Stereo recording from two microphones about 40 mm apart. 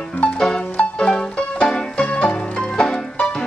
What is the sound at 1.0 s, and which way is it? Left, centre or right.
Music, centre.